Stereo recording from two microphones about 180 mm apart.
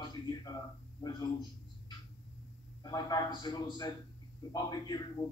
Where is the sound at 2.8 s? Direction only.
25° left (ahead or behind).